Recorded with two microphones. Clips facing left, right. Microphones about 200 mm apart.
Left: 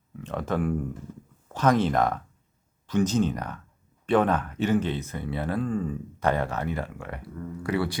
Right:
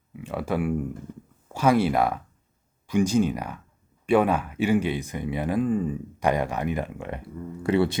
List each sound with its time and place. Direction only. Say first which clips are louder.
0.1 s a man's voice: right 1 dB; 10° right (ahead or behind); by 7.9 s 25° right (ahead or behind)